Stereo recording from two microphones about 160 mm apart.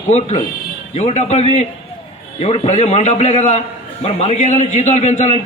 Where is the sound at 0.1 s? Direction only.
45° left (ahead or behind).